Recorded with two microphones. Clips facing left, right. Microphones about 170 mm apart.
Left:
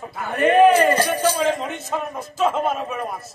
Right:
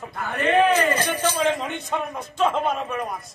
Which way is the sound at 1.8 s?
5° left (ahead or behind).